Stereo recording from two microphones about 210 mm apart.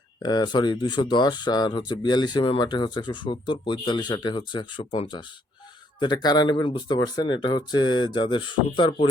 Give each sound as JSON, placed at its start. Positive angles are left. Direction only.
{"t": 0.2, "sound": "speech", "side_deg": 20}